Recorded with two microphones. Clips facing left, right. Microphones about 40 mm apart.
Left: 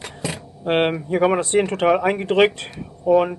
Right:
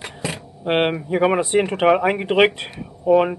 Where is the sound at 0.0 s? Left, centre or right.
Centre.